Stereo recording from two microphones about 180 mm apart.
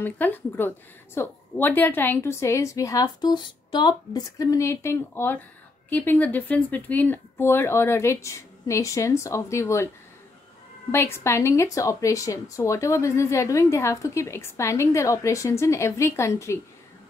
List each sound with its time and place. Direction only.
0.0 s speech: 10° left (ahead or behind)
10.9 s speech: 15° left (ahead or behind)